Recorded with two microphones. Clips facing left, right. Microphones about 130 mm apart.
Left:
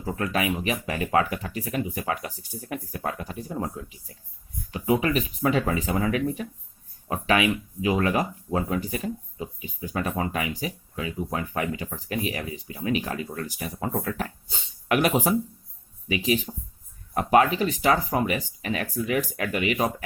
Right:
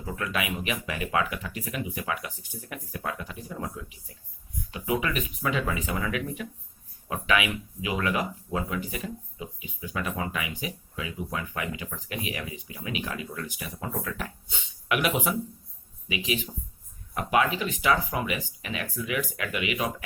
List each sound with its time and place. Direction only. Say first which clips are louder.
0.0 s speech: left 5 dB; 35° left (ahead or behind)